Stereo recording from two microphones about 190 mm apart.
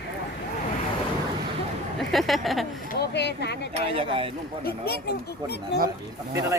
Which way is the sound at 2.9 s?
65° left (ahead or behind).